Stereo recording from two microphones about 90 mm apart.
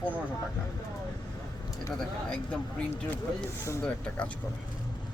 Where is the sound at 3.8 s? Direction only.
15° left (ahead or behind).